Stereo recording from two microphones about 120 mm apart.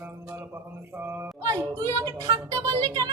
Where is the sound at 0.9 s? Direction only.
20° right (ahead or behind).